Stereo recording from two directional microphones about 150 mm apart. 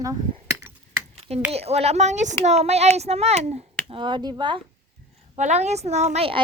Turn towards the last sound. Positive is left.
turn(degrees=-40)  # may be behind; listen again after turning